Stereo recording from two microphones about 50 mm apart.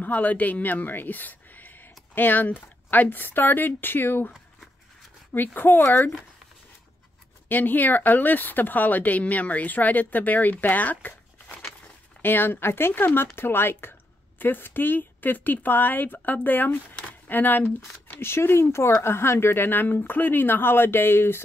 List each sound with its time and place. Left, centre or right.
0.0 s speech: left
5.3 s speech: left
7.4 s speech: left